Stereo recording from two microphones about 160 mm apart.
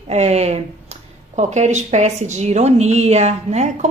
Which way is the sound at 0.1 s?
45° right (ahead or behind).